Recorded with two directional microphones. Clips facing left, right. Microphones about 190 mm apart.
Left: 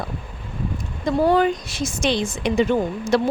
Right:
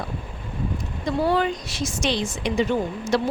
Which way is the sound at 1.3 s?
50° left (ahead or behind).